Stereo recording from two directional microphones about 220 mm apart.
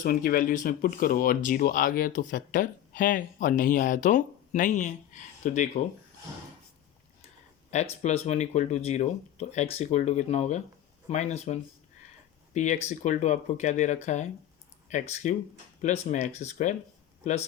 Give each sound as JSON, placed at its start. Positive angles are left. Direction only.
{"t": 0.0, "sound": "speech", "side_deg": 40}
{"t": 8.0, "sound": "speech", "side_deg": 30}